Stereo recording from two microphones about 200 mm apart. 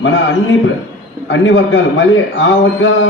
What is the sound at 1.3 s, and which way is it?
A man's voice, 70° left (ahead or behind).